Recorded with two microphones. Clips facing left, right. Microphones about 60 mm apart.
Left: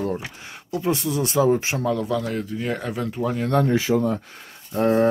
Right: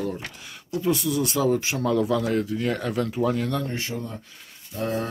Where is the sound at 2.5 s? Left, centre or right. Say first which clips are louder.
Right 1 dB; centre.